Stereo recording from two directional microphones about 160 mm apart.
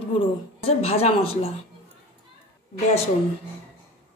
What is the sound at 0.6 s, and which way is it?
Speech, 40° left (ahead or behind).